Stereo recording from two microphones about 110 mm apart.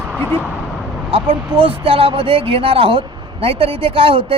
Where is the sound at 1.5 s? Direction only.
50° right (ahead or behind).